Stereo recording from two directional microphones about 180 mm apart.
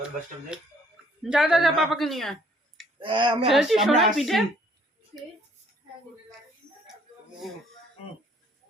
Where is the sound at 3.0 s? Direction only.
25° right (ahead or behind).